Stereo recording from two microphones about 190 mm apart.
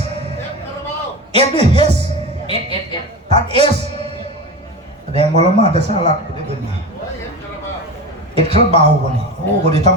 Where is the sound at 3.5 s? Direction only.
30° left (ahead or behind).